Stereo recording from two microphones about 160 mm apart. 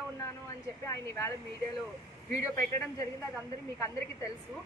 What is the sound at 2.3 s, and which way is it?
Speech, 20° left (ahead or behind).